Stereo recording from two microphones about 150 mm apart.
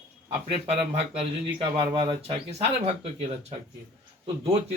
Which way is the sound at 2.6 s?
45° right (ahead or behind).